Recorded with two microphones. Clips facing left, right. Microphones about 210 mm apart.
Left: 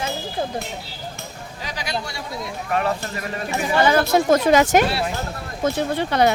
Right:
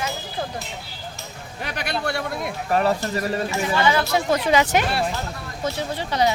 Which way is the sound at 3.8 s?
45° left (ahead or behind).